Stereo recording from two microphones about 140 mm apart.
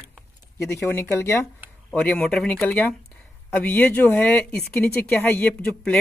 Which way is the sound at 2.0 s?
5° left (ahead or behind).